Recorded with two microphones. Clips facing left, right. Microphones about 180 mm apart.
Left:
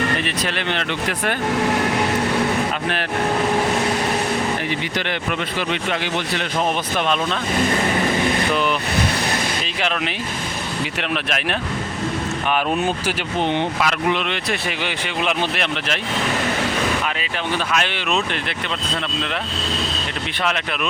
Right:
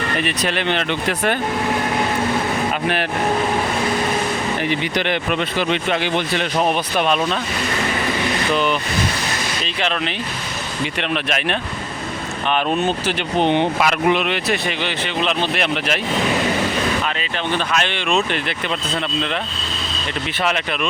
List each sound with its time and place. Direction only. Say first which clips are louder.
0.3 s speech: right 3 dB; 20° right (ahead or behind)
4.9 s speech: right 4 dB; 20° right (ahead or behind)
11.1 s speech: right 2 dB; centre (ahead or behind)
13.4 s speech: right 4 dB; 20° right (ahead or behind)
14.8 s speech: even; 10° left (ahead or behind)
15.5 s speech: right 3 dB; 10° right (ahead or behind)
17.2 s speech: right 2 dB; 5° left (ahead or behind)